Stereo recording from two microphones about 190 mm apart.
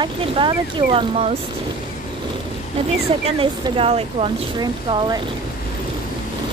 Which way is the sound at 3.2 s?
30° right (ahead or behind).